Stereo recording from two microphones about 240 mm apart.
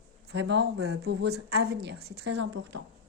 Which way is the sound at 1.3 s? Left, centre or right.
Right.